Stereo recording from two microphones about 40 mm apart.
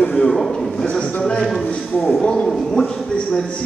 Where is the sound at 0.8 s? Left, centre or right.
Left.